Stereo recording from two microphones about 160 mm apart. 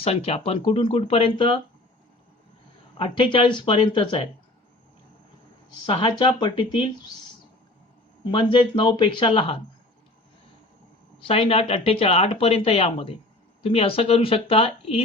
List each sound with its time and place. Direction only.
0.0 s speech: 40° left (ahead or behind)
3.0 s speech: 35° left (ahead or behind)
5.8 s speech: 35° left (ahead or behind)
8.2 s speech: 30° left (ahead or behind)
11.2 s speech: 35° left (ahead or behind)